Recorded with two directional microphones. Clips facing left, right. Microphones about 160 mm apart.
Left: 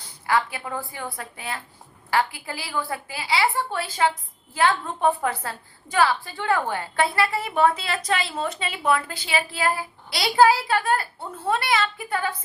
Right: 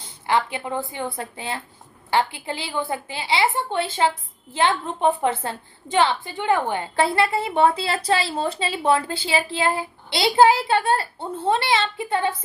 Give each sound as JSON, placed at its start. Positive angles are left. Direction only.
{"t": 0.0, "sound": "a woman's voice", "side_deg": -25}